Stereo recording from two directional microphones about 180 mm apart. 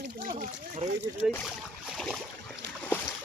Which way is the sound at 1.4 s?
Centre (ahead or behind).